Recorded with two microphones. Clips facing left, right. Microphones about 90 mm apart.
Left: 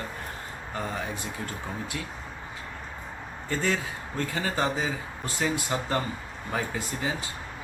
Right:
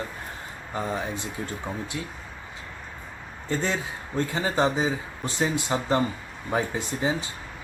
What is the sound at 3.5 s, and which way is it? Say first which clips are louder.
Speech: right 1 dB; 25° right (ahead or behind).